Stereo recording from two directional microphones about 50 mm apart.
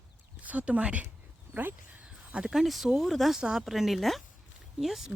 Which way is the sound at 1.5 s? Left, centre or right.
Right.